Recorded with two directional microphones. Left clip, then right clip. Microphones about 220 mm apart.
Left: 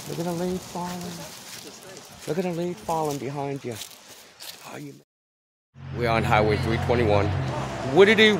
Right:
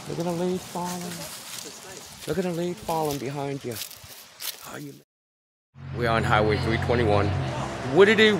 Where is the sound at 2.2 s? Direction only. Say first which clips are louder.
Even; centre (ahead or behind).